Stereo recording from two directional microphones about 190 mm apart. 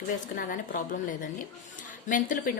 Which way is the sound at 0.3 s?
45° left (ahead or behind).